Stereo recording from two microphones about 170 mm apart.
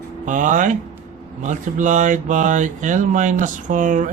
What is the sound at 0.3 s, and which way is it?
Mantra, 50° right (ahead or behind).